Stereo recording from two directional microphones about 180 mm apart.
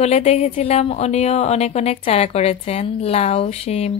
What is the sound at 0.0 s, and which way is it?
A woman's voice, 35° left (ahead or behind).